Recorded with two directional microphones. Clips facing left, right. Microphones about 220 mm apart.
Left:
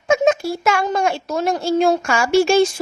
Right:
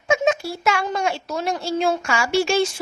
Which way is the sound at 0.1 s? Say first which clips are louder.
Left 4 dB; 45° left (ahead or behind).